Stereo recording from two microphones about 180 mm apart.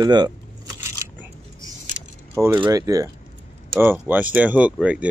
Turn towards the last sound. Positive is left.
turn(degrees=-5)  # may be behind; listen again after turning